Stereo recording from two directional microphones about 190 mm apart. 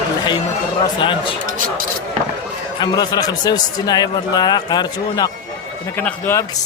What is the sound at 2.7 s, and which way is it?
A man's voice, 20° left (ahead or behind).